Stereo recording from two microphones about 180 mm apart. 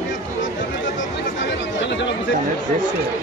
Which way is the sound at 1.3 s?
90° left.